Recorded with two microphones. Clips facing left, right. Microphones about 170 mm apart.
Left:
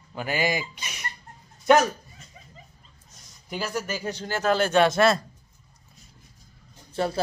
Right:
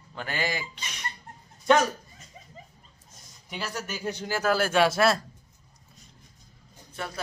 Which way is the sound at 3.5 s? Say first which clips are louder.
Left 5 dB; centre (ahead or behind).